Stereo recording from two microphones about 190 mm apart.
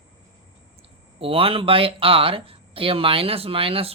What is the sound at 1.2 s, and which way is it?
Speech, 30° right (ahead or behind).